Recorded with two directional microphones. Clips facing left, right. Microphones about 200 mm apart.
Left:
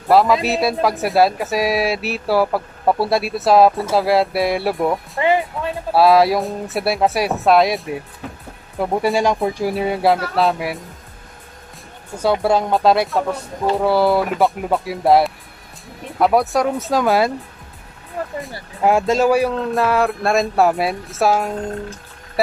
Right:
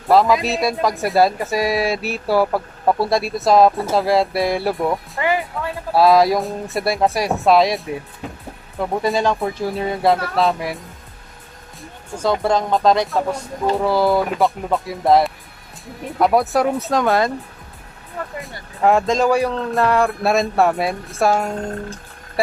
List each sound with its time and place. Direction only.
0.1 s speech: centre (ahead or behind)
5.2 s music: 25° left (ahead or behind)
5.9 s speech: 5° left (ahead or behind)
8.7 s speech: 10° left (ahead or behind)
12.2 s speech: 10° left (ahead or behind)
18.8 s speech: 5° left (ahead or behind)